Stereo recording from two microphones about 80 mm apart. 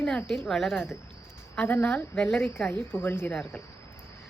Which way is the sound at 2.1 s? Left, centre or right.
Centre.